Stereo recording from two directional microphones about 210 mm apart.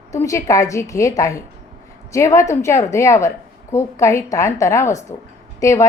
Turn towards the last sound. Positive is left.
turn(degrees=15)  # may be behind; listen again after turning